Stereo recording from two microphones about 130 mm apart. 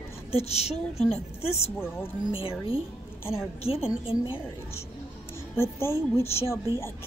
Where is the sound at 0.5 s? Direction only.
55° left (ahead or behind).